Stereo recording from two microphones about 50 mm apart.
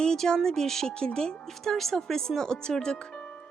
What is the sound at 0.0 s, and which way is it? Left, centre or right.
Speech, centre.